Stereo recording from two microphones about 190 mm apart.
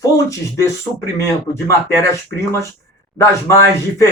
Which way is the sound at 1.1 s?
15° left (ahead or behind).